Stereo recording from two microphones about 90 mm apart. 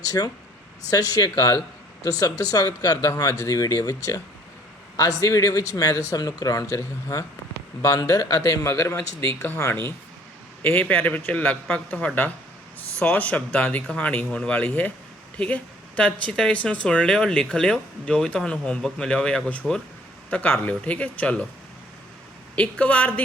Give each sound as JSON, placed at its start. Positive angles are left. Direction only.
{"t": 0.0, "sound": "speech", "side_deg": 45}
{"t": 10.6, "sound": "speech", "side_deg": 20}
{"t": 22.5, "sound": "speech", "side_deg": 15}